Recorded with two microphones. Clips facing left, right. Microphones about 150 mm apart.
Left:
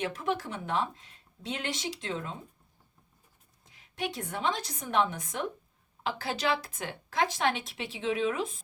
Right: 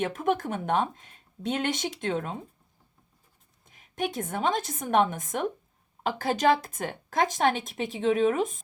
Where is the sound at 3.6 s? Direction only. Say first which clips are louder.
Right 4 dB; 50° right (ahead or behind).